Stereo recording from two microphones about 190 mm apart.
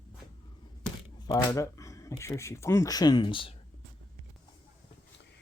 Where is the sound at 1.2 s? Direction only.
20° left (ahead or behind).